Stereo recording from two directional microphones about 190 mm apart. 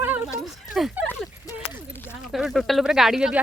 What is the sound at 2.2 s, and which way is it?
Speech, centre (ahead or behind).